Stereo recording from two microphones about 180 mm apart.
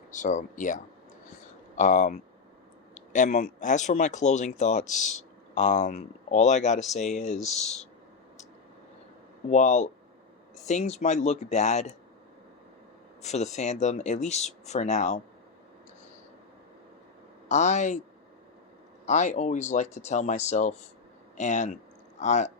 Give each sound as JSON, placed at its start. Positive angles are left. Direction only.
{"t": 0.1, "sound": "speech", "side_deg": 45}
{"t": 9.5, "sound": "speech", "side_deg": 40}
{"t": 13.2, "sound": "speech", "side_deg": 40}
{"t": 17.5, "sound": "speech", "side_deg": 40}
{"t": 19.0, "sound": "speech", "side_deg": 40}